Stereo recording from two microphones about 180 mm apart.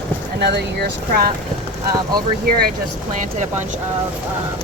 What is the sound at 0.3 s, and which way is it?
Speech, 70° right (ahead or behind).